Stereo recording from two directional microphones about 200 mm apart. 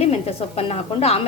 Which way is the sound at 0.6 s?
30° left (ahead or behind).